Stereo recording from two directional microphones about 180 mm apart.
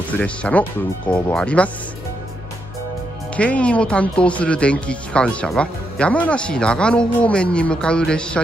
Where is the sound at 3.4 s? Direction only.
5° left (ahead or behind).